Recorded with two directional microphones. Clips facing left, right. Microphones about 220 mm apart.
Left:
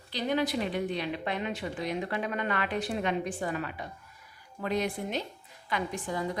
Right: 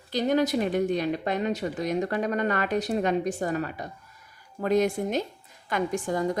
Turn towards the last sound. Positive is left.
turn(degrees=-45)  # may be behind; listen again after turning